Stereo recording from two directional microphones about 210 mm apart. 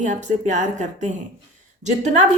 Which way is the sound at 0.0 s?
35° right (ahead or behind).